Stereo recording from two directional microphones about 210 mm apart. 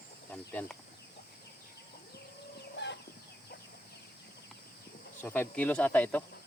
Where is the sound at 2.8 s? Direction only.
55° left (ahead or behind).